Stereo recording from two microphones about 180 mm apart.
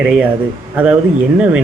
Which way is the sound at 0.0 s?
5° right (ahead or behind).